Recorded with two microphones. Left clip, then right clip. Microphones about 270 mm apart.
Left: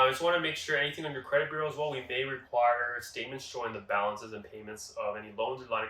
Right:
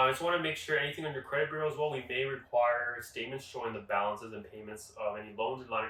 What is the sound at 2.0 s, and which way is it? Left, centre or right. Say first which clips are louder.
Speech: left 1 dB; centre.